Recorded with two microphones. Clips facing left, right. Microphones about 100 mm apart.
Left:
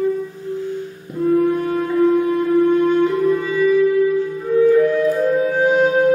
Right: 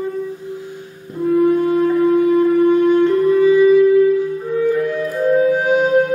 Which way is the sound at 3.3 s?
15° right (ahead or behind).